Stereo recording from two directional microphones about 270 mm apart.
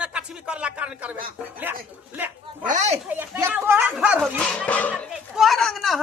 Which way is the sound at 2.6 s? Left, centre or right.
Right.